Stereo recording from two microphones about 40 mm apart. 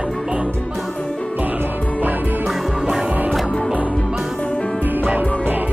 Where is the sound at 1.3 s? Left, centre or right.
Right.